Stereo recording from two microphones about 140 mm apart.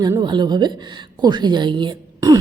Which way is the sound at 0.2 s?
30° right (ahead or behind).